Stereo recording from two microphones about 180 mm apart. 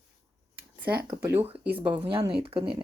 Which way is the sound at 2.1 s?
30° right (ahead or behind).